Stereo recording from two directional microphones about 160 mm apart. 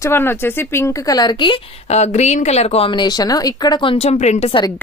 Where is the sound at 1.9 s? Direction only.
45° left (ahead or behind).